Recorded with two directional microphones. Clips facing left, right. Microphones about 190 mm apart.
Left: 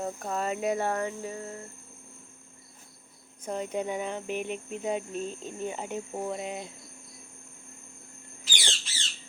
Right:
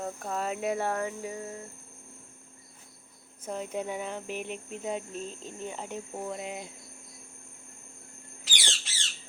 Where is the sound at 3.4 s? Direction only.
Centre (ahead or behind).